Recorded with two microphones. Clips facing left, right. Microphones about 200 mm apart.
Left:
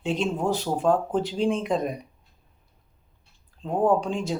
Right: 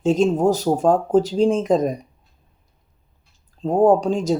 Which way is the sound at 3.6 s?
40° right (ahead or behind).